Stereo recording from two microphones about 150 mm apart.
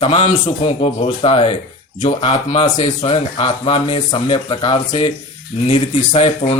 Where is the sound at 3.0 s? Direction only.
40° left (ahead or behind).